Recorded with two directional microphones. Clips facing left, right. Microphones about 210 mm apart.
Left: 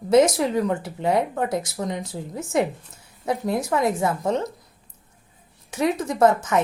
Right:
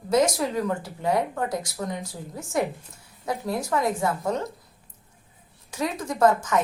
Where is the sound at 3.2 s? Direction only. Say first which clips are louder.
Left 4 dB; 25° left (ahead or behind).